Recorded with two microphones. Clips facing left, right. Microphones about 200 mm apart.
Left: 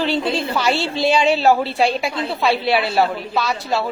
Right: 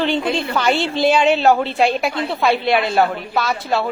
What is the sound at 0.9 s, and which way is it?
A woman's voice, centre (ahead or behind).